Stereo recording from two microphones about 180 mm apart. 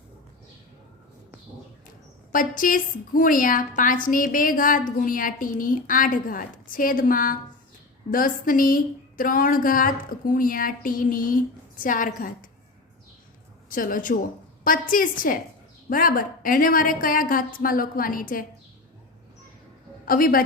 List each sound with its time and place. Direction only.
2.3 s a woman's voice: 50° left (ahead or behind)
13.7 s a woman's voice: 50° left (ahead or behind)
20.1 s a woman's voice: 50° left (ahead or behind)